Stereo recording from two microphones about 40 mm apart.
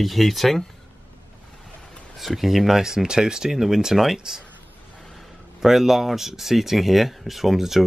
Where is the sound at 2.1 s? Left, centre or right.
Centre.